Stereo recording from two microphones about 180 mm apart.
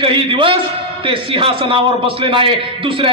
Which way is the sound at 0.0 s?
30° right (ahead or behind).